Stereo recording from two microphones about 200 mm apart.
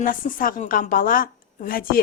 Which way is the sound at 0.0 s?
45° left (ahead or behind).